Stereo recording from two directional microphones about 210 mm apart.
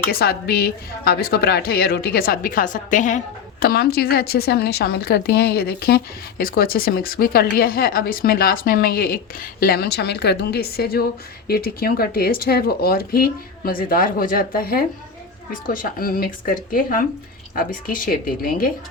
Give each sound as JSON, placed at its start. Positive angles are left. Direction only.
{"t": 0.1, "sound": "speech", "side_deg": 45}